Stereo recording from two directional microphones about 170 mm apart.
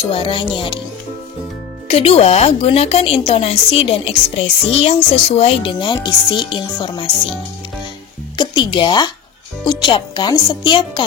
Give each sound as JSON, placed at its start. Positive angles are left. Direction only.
{"t": 0.0, "sound": "speech", "side_deg": 30}
{"t": 1.9, "sound": "a woman's voice", "side_deg": 35}
{"t": 8.4, "sound": "speech", "side_deg": 30}